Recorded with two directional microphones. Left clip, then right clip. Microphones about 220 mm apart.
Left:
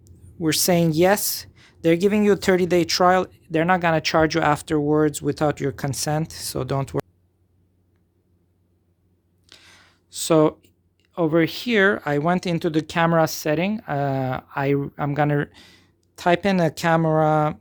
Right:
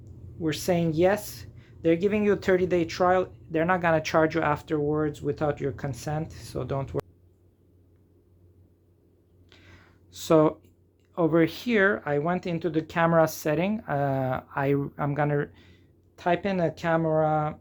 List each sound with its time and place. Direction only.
0.0 s speech: 50° left (ahead or behind)
9.5 s a sound: 50° left (ahead or behind)
11.1 s speech: 35° left (ahead or behind); by 17.6 s 50° left (ahead or behind)